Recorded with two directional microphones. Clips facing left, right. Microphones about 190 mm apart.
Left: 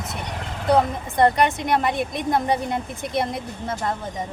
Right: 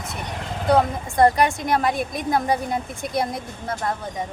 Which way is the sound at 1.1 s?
20° left (ahead or behind).